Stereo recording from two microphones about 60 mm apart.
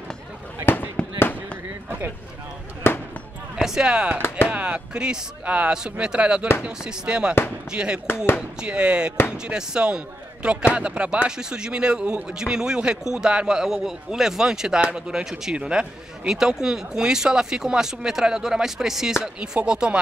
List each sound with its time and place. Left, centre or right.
1.0 s fireworks: centre
1.9 s a sound: right
3.5 s speech: centre